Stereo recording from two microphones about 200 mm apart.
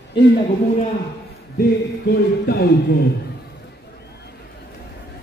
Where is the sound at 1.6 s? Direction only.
50° left (ahead or behind).